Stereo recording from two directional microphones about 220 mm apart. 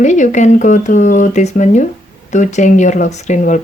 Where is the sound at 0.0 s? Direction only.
35° left (ahead or behind).